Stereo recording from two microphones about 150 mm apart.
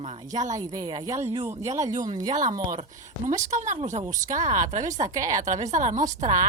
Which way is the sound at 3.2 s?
50° right (ahead or behind).